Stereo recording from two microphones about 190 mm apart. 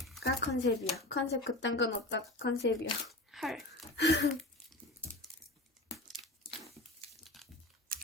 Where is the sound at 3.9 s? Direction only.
65° left (ahead or behind).